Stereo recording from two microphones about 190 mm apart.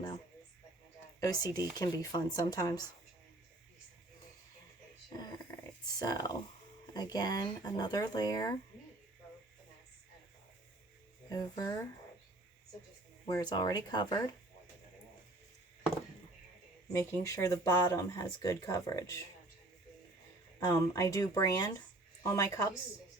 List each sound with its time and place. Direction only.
1.2 s speech: 20° left (ahead or behind)
5.0 s a sound: 20° left (ahead or behind)
6.0 s speech: 20° left (ahead or behind)
11.3 s speech: 20° left (ahead or behind)
13.2 s speech: 20° left (ahead or behind)
17.0 s speech: 15° left (ahead or behind)
20.7 s speech: 15° left (ahead or behind)